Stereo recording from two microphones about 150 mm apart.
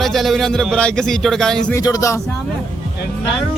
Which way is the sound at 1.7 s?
25° left (ahead or behind).